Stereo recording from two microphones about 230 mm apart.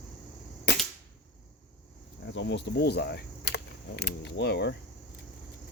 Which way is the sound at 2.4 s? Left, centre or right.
Left.